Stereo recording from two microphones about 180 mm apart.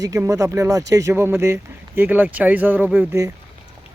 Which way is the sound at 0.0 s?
20° right (ahead or behind).